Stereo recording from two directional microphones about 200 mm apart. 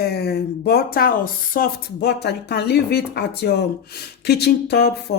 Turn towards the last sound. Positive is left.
turn(degrees=55)  # may be behind; listen again after turning